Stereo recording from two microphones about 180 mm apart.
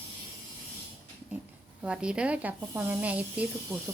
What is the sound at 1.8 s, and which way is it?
Speech, 5° right (ahead or behind).